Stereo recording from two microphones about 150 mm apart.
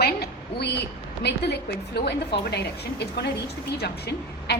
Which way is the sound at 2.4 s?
90° left.